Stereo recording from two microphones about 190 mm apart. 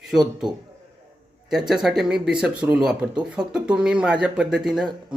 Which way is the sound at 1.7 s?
Centre (ahead or behind).